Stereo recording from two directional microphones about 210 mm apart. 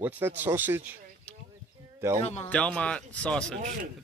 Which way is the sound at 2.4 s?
5° left (ahead or behind).